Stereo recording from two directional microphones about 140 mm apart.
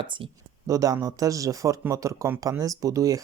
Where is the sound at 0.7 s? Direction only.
25° right (ahead or behind).